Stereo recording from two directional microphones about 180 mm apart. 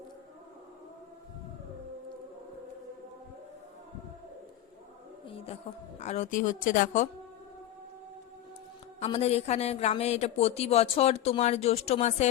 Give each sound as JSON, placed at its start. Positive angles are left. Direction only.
{"t": 5.2, "sound": "a sound", "side_deg": 30}
{"t": 6.0, "sound": "speech", "side_deg": 40}
{"t": 9.0, "sound": "speech", "side_deg": 35}